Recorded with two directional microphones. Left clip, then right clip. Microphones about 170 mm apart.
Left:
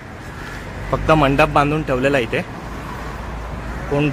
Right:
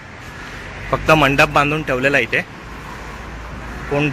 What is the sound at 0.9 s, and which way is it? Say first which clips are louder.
A man's voice: right 2 dB; 20° right (ahead or behind).